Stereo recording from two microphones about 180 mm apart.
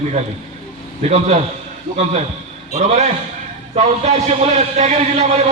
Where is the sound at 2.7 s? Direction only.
40° right (ahead or behind).